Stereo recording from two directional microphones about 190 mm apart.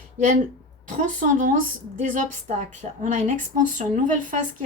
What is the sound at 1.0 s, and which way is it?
A woman's voice, 40° right (ahead or behind).